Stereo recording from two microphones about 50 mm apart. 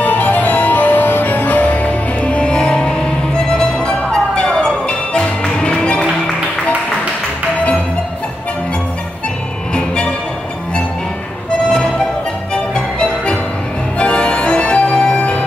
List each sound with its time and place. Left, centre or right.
0.0 s music: left
12.7 s music: centre
13.9 s organ: left